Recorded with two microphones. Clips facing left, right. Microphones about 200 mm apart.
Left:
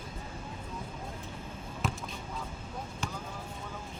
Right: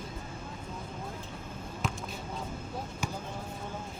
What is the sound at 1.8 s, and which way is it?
Basketball bounce, centre (ahead or behind).